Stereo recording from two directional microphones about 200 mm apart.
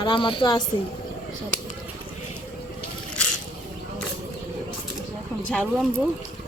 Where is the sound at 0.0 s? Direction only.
25° left (ahead or behind).